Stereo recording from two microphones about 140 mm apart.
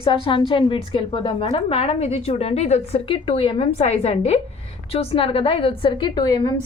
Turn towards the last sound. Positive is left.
turn(degrees=30)  # may be behind; listen again after turning